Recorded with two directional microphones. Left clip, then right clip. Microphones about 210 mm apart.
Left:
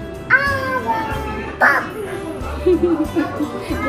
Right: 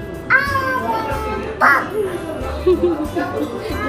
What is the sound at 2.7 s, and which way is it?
Music, 30° left (ahead or behind).